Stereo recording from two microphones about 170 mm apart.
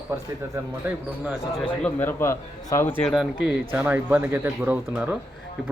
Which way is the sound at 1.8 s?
10° left (ahead or behind).